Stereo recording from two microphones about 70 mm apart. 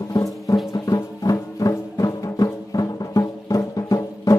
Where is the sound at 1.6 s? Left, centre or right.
Left.